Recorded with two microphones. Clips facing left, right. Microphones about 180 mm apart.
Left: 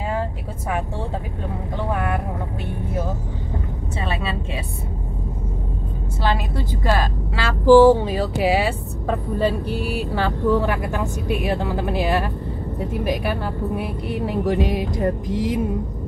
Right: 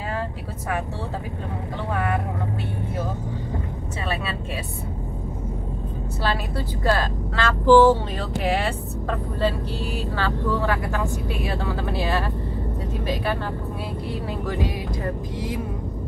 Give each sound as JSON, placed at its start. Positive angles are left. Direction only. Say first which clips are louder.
{"t": 6.2, "sound": "vehicle", "louder": "left 3 dB", "side_deg": 20}
{"t": 6.8, "sound": "speech", "louder": "even", "side_deg": 15}